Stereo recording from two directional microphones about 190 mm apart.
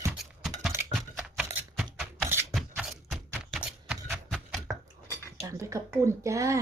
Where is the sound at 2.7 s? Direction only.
5° right (ahead or behind).